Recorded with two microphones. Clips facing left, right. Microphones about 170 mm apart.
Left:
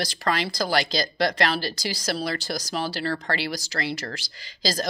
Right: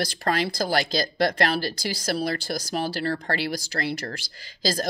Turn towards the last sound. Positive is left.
turn(degrees=-50)  # may be behind; listen again after turning